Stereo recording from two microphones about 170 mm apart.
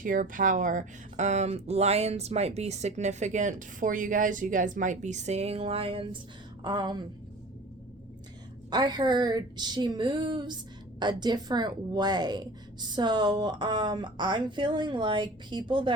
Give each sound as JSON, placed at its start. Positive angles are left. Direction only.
{"t": 0.0, "sound": "a woman's voice", "side_deg": -50}
{"t": 8.7, "sound": "a woman's voice", "side_deg": -25}